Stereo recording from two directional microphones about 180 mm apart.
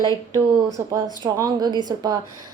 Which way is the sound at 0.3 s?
15° right (ahead or behind).